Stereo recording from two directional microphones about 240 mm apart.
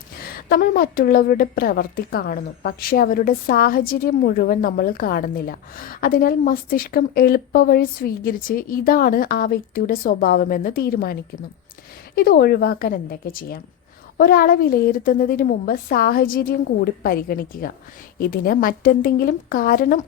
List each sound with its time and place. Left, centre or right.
0.3 s a woman's voice: left